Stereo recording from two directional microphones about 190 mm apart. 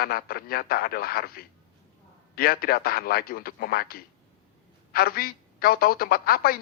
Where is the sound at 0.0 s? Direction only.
50° left (ahead or behind).